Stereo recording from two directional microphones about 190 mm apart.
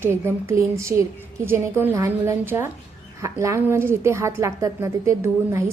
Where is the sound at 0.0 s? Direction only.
15° right (ahead or behind).